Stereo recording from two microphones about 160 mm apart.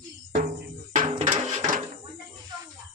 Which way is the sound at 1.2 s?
50° right (ahead or behind).